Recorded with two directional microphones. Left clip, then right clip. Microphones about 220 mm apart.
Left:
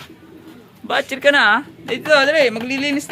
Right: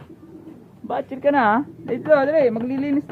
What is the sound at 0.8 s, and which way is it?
Speech, centre (ahead or behind).